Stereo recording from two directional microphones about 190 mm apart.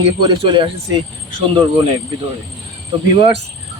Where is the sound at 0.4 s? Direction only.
25° right (ahead or behind).